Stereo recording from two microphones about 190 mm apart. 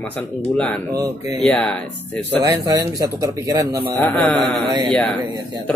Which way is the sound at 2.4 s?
20° right (ahead or behind).